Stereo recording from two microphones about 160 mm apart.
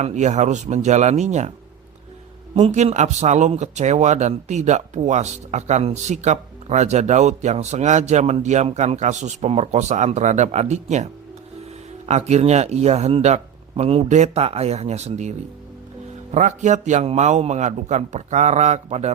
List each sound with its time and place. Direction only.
0.0 s speech: 45° right (ahead or behind)
2.6 s speech: 45° right (ahead or behind)